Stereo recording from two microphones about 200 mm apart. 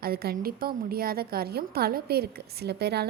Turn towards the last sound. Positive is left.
turn(degrees=-55)  # may be behind; listen again after turning